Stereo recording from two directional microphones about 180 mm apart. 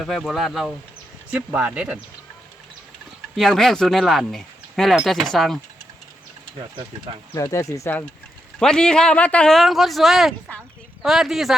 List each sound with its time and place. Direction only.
0.0 s speech: centre (ahead or behind)
3.3 s speech: centre (ahead or behind)
7.3 s speech: 20° left (ahead or behind); by 11.5 s centre (ahead or behind)